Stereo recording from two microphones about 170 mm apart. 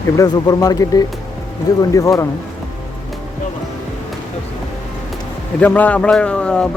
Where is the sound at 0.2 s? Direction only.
20° left (ahead or behind).